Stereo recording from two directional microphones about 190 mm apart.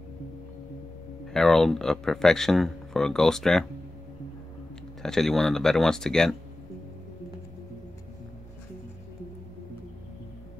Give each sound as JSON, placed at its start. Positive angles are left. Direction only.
{"t": 1.2, "sound": "speech", "side_deg": 0}
{"t": 5.0, "sound": "speech", "side_deg": 0}